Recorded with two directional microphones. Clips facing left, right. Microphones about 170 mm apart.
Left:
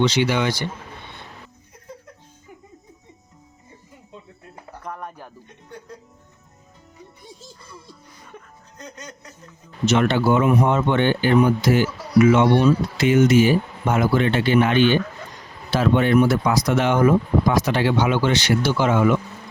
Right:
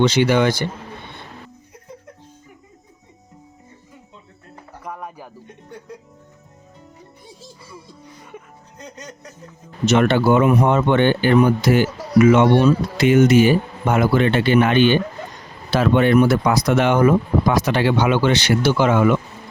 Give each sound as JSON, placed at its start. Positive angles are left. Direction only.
{"t": 0.0, "sound": "speech", "side_deg": -50}
{"t": 4.8, "sound": "a sound", "side_deg": -5}
{"t": 9.8, "sound": "speech", "side_deg": -60}